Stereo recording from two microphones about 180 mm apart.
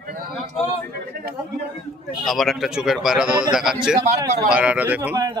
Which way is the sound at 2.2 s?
Centre (ahead or behind).